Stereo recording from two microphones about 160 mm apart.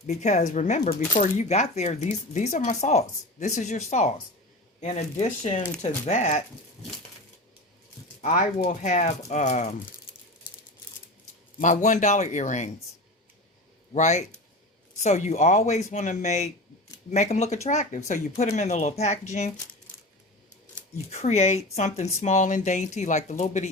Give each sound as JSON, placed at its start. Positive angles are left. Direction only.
{"t": 0.2, "sound": "speech", "side_deg": 45}
{"t": 8.2, "sound": "speech", "side_deg": 55}
{"t": 11.6, "sound": "speech", "side_deg": 50}
{"t": 13.9, "sound": "speech", "side_deg": 45}
{"t": 21.1, "sound": "speech", "side_deg": 45}